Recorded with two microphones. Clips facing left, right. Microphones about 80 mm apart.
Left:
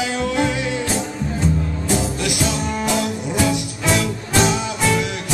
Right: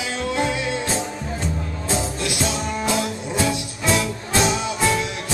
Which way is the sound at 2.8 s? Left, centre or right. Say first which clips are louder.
Left 2 dB; right.